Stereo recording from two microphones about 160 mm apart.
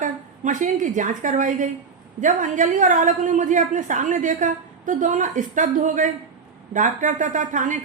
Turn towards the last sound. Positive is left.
turn(degrees=-55)  # may be behind; listen again after turning